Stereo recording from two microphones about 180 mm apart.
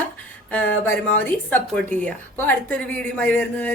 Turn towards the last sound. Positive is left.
turn(degrees=10)  # may be behind; listen again after turning